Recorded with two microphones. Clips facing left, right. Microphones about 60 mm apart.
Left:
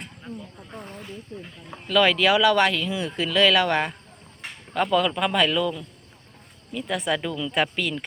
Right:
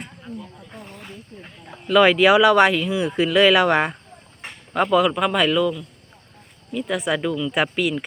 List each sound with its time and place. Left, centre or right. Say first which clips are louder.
1.9 s speech: right 5 dB; centre
6.7 s speech: right 3 dB; centre